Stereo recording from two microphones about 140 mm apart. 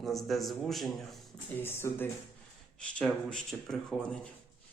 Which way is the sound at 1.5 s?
15° left (ahead or behind).